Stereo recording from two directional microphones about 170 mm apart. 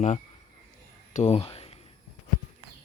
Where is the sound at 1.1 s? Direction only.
40° left (ahead or behind).